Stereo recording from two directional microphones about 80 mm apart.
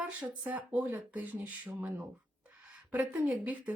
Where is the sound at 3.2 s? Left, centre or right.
Centre.